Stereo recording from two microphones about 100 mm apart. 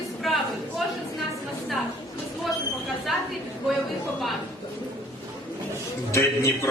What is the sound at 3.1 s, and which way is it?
Speech, centre (ahead or behind).